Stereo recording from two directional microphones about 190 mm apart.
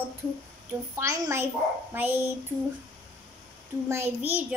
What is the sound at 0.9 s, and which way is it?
A woman's voice, 15° right (ahead or behind).